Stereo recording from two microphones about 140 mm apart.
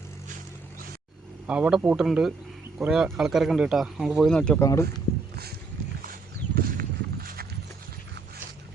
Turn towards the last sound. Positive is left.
turn(degrees=-90)